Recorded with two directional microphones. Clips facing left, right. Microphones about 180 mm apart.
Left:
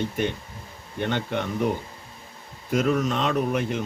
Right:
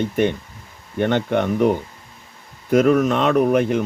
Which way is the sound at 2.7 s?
60° right (ahead or behind).